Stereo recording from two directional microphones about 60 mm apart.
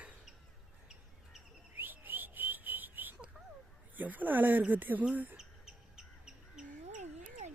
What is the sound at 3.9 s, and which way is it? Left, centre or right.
A woman's voice, right.